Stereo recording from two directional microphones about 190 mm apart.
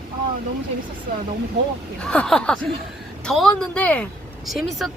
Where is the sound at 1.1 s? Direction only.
55° right (ahead or behind).